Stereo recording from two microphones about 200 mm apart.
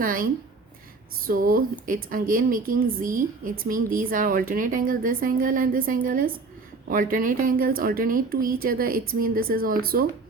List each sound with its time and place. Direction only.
0.0 s a woman's voice: 45° right (ahead or behind)
1.3 s a woman's voice: 45° right (ahead or behind)